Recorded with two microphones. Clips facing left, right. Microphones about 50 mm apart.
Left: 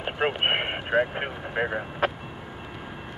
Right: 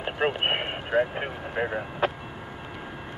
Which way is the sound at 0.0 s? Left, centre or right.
Left.